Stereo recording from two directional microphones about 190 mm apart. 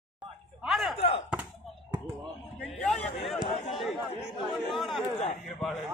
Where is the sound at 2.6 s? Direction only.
5° left (ahead or behind).